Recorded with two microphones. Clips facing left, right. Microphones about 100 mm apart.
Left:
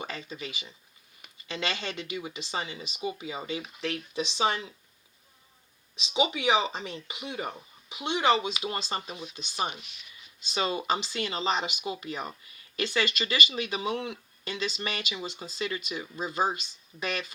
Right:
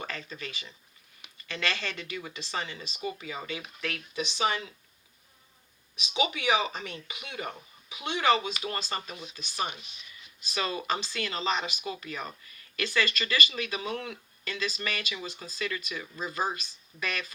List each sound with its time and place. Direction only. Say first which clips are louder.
0.0 s speech: left 1 dB; 20° left (ahead or behind)
6.0 s speech: left 2 dB; 25° left (ahead or behind)